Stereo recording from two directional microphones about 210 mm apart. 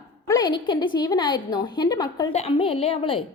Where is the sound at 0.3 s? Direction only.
20° left (ahead or behind).